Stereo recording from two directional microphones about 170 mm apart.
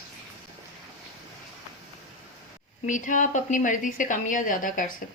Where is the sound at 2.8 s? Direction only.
50° left (ahead or behind).